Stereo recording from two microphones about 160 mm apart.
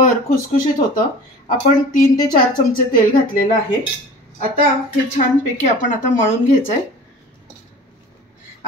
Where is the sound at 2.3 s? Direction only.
60° left (ahead or behind).